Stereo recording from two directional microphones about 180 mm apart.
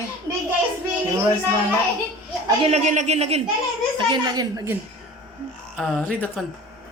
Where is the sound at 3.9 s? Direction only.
25° right (ahead or behind).